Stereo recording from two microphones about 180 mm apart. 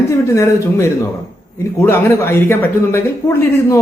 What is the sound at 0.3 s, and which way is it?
A man's voice, 15° left (ahead or behind).